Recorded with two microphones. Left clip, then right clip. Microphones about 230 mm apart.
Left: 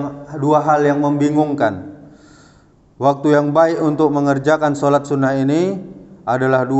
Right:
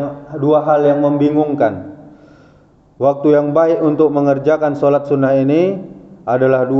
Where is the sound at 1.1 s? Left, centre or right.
Left.